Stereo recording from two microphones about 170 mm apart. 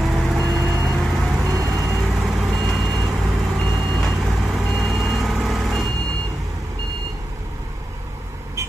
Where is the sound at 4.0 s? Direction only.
Centre (ahead or behind).